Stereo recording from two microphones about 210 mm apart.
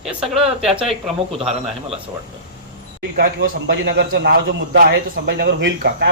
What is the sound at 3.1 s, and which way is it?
A man's voice, 50° right (ahead or behind).